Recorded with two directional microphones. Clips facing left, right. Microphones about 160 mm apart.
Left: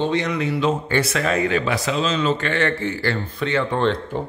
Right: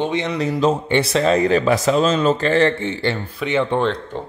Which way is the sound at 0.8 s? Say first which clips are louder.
Right 4 dB; 25° right (ahead or behind).